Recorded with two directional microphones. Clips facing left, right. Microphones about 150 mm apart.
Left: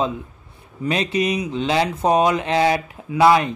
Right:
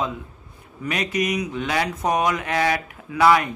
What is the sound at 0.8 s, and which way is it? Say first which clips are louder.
Speech: left 3 dB; 25° left (ahead or behind).